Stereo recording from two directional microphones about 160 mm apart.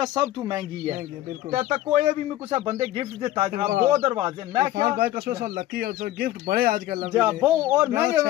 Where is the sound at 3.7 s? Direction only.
50° right (ahead or behind).